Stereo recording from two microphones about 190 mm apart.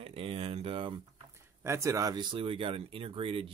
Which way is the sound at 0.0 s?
30° right (ahead or behind).